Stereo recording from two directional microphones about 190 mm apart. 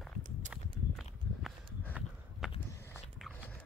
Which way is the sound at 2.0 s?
5° right (ahead or behind).